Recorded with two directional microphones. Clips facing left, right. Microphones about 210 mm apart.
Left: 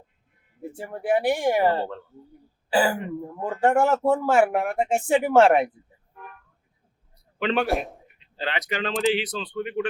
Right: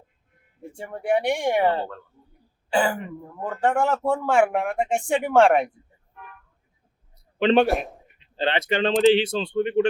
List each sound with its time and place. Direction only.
0.8 s speech: 5° left (ahead or behind)
7.3 s a man's voice: 25° right (ahead or behind)